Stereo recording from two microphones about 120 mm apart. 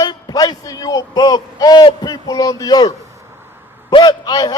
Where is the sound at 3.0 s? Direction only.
25° right (ahead or behind).